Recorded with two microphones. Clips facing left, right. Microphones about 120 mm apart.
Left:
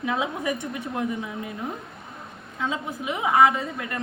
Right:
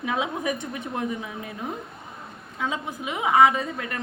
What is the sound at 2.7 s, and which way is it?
Speech, 20° right (ahead or behind).